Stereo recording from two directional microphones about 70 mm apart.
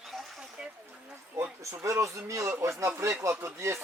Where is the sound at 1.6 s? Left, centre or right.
Right.